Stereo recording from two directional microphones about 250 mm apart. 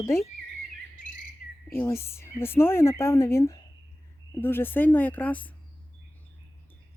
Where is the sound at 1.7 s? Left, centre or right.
Centre.